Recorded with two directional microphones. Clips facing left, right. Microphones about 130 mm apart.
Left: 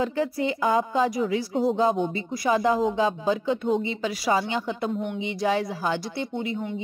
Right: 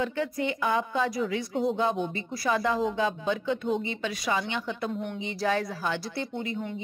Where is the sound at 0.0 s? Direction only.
35° left (ahead or behind).